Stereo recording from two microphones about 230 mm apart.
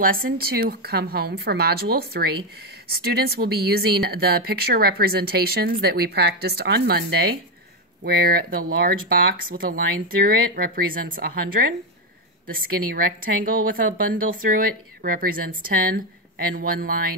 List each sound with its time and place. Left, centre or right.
0.0 s speech: right